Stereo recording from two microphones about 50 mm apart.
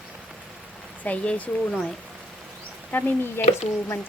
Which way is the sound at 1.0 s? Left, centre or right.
Left.